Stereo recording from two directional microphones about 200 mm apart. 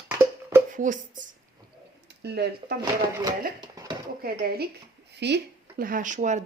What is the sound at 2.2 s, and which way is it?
Speech, 55° right (ahead or behind).